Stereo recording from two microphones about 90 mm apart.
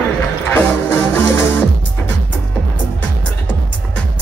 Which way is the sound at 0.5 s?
25° left (ahead or behind).